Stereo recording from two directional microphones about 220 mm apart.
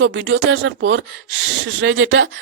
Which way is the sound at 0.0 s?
55° right (ahead or behind).